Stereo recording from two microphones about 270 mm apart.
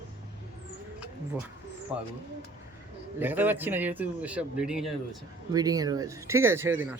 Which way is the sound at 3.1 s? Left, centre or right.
Centre.